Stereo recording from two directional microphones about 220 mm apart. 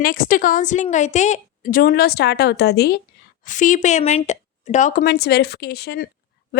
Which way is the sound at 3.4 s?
35° left (ahead or behind).